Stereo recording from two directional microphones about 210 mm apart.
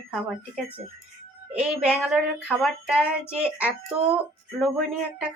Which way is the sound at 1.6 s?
5° right (ahead or behind).